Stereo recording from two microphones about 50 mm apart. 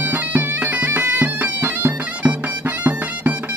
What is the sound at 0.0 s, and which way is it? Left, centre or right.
Bagpipes, right.